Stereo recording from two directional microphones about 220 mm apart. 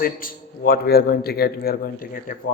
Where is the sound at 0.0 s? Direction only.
40° left (ahead or behind).